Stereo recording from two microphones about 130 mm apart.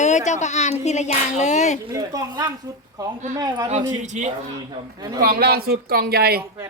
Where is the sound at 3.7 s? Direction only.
65° right (ahead or behind).